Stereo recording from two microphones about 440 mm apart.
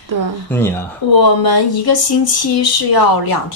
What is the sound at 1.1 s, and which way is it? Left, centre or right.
Speech, left.